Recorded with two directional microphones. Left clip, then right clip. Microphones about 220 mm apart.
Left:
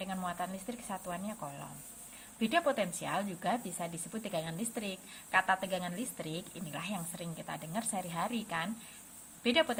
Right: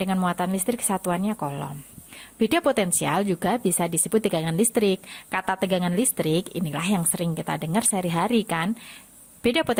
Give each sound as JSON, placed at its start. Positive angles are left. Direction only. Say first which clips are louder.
{"t": 0.0, "sound": "speech", "louder": "right 12 dB", "side_deg": -50}